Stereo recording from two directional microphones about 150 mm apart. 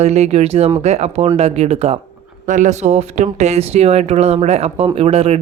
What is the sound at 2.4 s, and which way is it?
Speech, 60° right (ahead or behind).